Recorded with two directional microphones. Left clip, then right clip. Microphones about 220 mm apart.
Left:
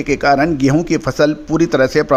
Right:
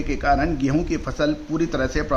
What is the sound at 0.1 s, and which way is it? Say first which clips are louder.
A man's voice: left 8 dB; 45° left (ahead or behind).